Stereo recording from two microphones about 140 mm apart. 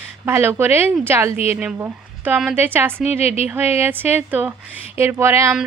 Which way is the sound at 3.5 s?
15° right (ahead or behind).